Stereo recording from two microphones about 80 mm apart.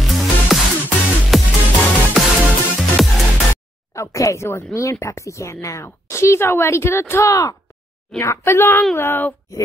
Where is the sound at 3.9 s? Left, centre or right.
Left.